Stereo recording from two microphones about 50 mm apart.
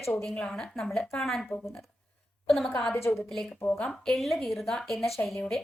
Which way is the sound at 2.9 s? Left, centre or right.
Left.